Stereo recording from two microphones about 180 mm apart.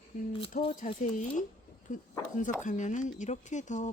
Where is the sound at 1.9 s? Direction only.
45° left (ahead or behind).